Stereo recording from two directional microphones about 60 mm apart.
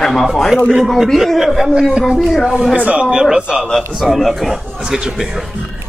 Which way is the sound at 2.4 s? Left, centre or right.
Centre.